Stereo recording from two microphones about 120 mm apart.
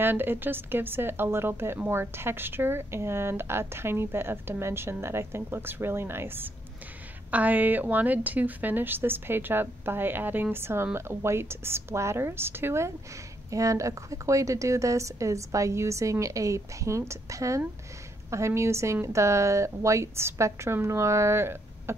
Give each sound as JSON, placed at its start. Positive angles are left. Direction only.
{"t": 0.0, "sound": "a woman's voice", "side_deg": -15}